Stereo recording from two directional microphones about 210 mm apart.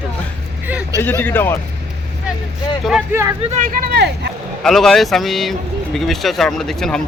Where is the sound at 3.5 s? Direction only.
40° right (ahead or behind).